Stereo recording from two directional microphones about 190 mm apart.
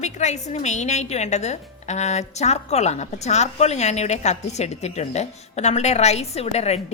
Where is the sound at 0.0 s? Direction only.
35° left (ahead or behind).